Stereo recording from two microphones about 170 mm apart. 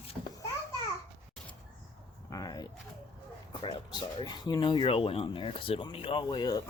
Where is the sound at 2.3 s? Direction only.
20° left (ahead or behind).